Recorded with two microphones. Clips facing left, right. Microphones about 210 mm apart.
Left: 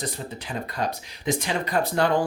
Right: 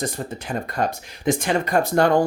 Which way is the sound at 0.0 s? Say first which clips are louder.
Right 5 dB; 50° right (ahead or behind).